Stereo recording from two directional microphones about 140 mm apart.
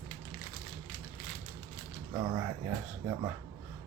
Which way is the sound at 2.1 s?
30° right (ahead or behind).